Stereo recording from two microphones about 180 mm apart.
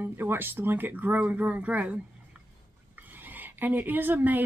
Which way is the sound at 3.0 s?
10° right (ahead or behind).